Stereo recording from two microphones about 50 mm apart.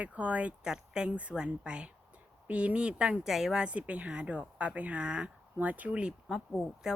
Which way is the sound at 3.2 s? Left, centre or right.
Centre.